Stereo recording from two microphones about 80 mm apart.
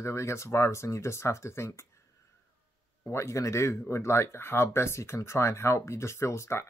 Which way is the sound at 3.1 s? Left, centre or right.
Left.